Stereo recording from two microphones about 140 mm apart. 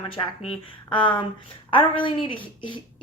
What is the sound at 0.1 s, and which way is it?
A woman's voice, 40° left (ahead or behind).